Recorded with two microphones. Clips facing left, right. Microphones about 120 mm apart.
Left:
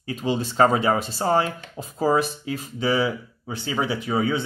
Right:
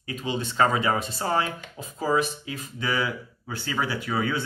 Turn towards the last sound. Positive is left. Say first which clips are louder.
# left 4 dB
turn(degrees=20)  # may be behind; listen again after turning